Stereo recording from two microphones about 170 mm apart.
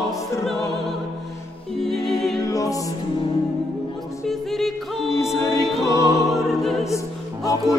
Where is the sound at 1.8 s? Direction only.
Centre (ahead or behind).